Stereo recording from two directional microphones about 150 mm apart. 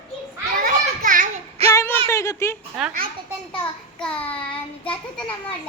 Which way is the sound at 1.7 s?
20° left (ahead or behind).